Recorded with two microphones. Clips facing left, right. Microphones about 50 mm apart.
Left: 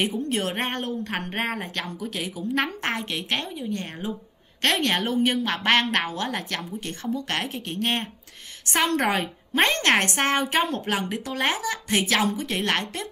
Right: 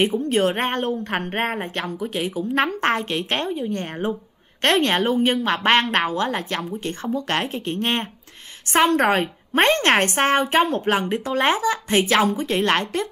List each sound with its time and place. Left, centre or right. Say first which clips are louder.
0.0 s a woman's voice: right 6 dB; right
2.3 s a woman's voice: right 4 dB; right